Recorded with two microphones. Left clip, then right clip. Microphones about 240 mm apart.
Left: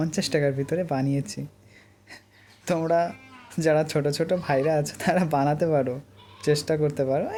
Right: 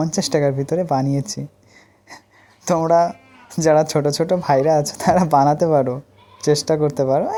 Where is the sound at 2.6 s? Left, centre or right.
Centre.